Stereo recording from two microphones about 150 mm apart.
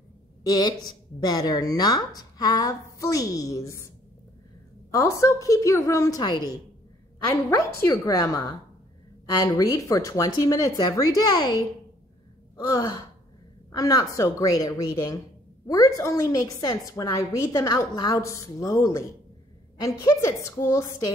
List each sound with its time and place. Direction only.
0.4 s a woman's voice: 25° left (ahead or behind)
4.9 s a woman's voice: 20° left (ahead or behind)
7.8 s a woman's voice: 20° left (ahead or behind)